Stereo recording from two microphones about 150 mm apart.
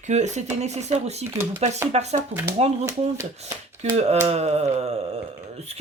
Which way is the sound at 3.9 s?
45° right (ahead or behind).